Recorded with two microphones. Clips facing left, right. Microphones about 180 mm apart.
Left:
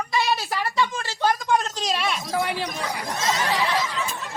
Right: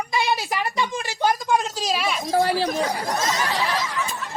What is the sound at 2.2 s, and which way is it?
Speech, 40° right (ahead or behind).